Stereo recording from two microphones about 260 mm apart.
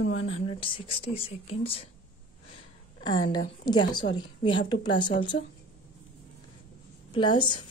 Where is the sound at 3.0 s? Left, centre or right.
Centre.